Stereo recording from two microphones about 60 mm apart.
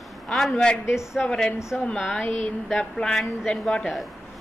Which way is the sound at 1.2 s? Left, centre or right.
Centre.